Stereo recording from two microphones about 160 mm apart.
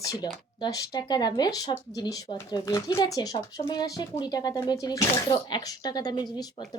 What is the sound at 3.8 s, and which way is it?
Speech, 20° left (ahead or behind).